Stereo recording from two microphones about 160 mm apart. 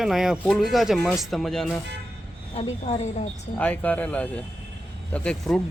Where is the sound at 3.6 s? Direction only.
10° left (ahead or behind).